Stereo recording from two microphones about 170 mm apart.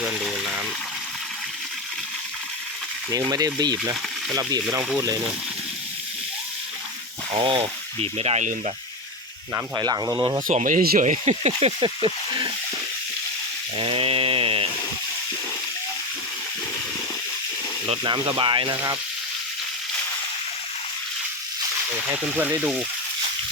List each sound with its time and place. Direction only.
0.0 s speech: 5° right (ahead or behind)
3.1 s speech: 20° right (ahead or behind)
7.3 s speech: 30° right (ahead or behind)
9.7 s speech: 20° right (ahead or behind)
10.4 s speech: 50° right (ahead or behind); by 12.1 s 35° right (ahead or behind)
13.7 s chainsaw: 30° right (ahead or behind)
17.8 s speech: 30° right (ahead or behind)
22.1 s speech: 10° right (ahead or behind)